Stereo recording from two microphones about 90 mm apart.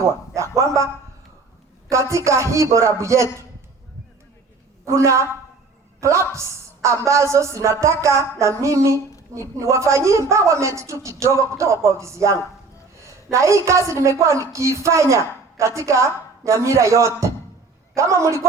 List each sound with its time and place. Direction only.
0.5 s a man's voice: 35° right (ahead or behind)
1.9 s a woman's voice: 35° right (ahead or behind)
4.9 s a woman's voice: 35° right (ahead or behind)